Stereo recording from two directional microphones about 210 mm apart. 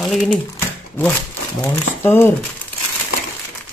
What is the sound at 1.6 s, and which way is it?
Speech, 10° left (ahead or behind).